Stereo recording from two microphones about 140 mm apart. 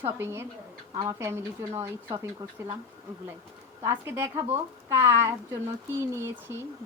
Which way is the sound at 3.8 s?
20° right (ahead or behind).